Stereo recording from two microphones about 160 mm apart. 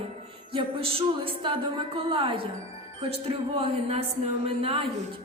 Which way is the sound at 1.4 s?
30° right (ahead or behind).